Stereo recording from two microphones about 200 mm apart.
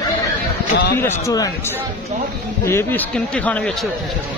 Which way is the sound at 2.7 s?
10° left (ahead or behind).